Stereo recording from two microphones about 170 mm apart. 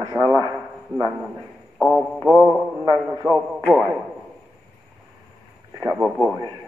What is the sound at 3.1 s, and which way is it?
Speech, 20° right (ahead or behind).